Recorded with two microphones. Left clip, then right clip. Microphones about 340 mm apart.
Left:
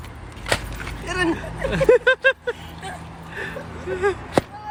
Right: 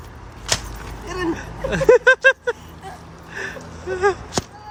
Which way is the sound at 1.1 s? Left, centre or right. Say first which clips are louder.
Left 2 dB; centre.